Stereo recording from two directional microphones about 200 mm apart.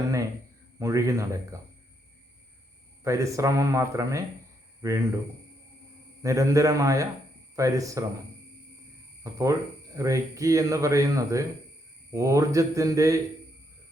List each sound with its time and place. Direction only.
0.8 s speech: 15° right (ahead or behind)
3.0 s speech: 15° right (ahead or behind)
6.2 s speech: 15° right (ahead or behind)
9.2 s speech: 15° right (ahead or behind)